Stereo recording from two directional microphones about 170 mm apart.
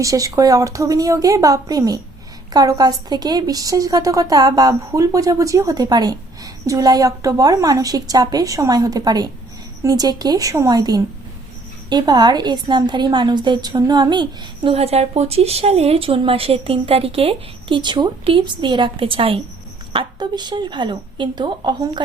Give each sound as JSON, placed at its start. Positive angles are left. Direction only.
{"t": 0.0, "sound": "a woman's voice", "side_deg": -20}